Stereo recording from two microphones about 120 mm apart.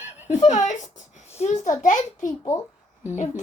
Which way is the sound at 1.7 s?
90° left.